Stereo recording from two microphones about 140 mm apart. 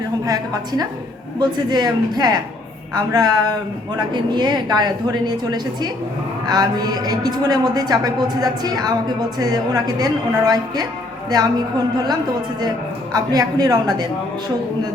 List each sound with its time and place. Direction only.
0.3 s a woman's voice: 30° right (ahead or behind)
13.1 s speech: 30° right (ahead or behind)